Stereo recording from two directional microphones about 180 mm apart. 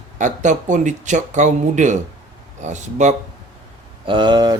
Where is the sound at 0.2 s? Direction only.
45° right (ahead or behind).